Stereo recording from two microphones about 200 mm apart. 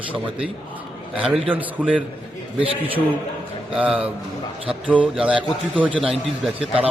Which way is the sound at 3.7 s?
5° right (ahead or behind).